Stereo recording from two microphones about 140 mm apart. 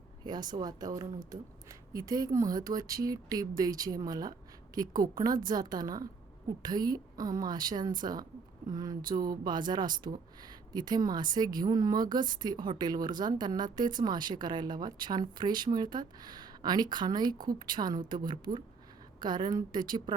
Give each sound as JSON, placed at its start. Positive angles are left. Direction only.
{"t": 0.3, "sound": "speech", "side_deg": -30}